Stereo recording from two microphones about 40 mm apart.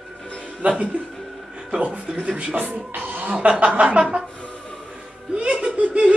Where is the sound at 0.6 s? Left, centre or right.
Right.